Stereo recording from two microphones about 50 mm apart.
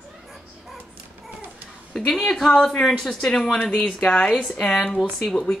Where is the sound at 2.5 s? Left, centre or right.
Left.